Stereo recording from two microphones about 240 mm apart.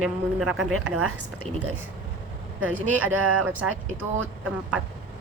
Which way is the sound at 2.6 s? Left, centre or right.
Centre.